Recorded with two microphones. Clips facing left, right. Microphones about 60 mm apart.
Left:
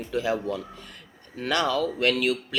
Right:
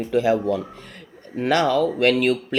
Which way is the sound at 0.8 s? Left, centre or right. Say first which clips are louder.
Right 6 dB; right.